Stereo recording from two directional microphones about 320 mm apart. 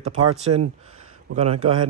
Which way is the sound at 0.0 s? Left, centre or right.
Right.